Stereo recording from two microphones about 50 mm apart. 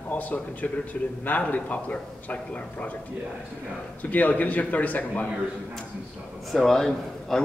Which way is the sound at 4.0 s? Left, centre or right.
Left.